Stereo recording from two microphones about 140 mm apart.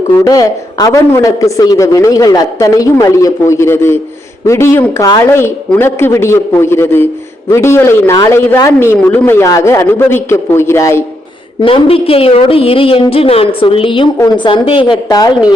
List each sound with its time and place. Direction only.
0.3 s a man's voice: 25° left (ahead or behind)
11.6 s a woman's voice: 40° left (ahead or behind)